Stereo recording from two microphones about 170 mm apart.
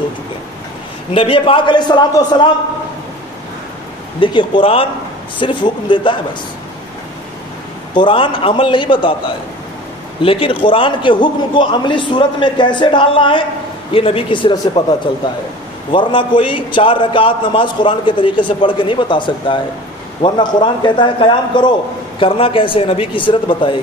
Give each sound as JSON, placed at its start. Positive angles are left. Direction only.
{"t": 1.1, "sound": "a man's voice", "side_deg": 30}
{"t": 4.2, "sound": "a man's voice", "side_deg": 30}
{"t": 7.9, "sound": "a man's voice", "side_deg": 30}
{"t": 10.2, "sound": "a man's voice", "side_deg": 30}